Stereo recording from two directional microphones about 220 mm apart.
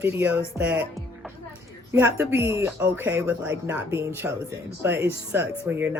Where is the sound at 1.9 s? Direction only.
10° right (ahead or behind).